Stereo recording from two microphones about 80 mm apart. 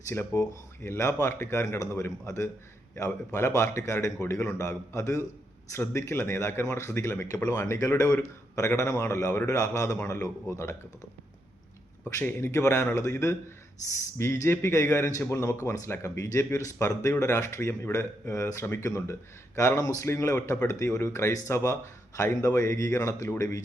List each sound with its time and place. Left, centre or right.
0.1 s speech: left
0.8 s a man's voice: left
12.0 s a man's voice: left